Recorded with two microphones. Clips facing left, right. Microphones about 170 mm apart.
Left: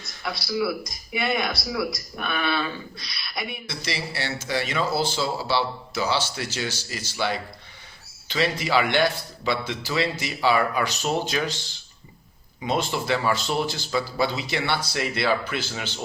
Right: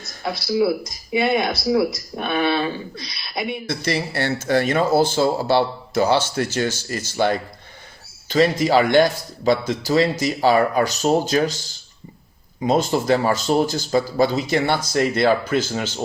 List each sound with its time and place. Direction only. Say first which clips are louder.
0.2 s speech: right 6 dB; 25° right (ahead or behind)
3.7 s a man's voice: right 8 dB; 50° right (ahead or behind)